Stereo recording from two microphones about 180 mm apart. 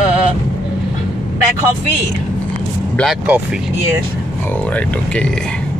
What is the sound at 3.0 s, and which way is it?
Speech, 5° right (ahead or behind).